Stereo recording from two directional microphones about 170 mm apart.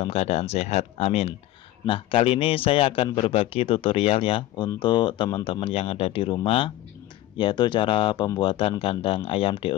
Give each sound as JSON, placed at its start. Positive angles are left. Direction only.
{"t": 0.0, "sound": "a man's voice", "side_deg": 35}